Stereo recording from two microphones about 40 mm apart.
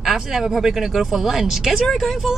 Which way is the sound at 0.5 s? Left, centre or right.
Centre.